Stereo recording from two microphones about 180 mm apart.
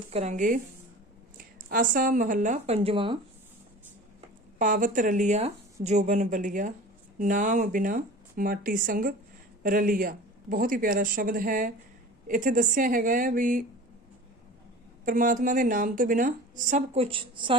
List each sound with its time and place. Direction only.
0.1 s a woman's voice: 40° right (ahead or behind)
4.5 s a woman's voice: 45° right (ahead or behind)
15.0 s a woman's voice: 50° right (ahead or behind); by 17.6 s 30° right (ahead or behind)